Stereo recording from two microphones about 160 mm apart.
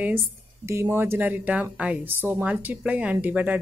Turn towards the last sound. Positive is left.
turn(degrees=-10)  # may be behind; listen again after turning